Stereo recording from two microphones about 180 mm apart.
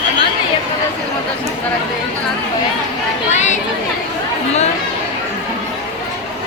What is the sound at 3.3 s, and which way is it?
Chatter, 40° left (ahead or behind).